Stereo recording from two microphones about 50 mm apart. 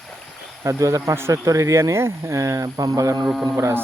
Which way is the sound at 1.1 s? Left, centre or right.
Right.